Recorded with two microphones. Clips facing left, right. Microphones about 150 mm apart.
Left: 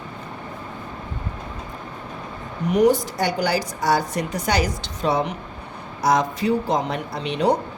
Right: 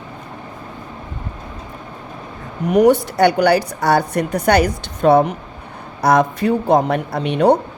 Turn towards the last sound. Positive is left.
turn(degrees=-55)  # may be behind; listen again after turning